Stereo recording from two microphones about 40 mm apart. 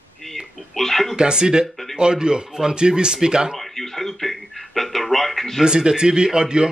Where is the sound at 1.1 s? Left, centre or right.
Right.